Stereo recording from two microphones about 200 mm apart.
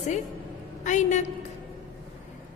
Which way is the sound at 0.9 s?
35° left (ahead or behind).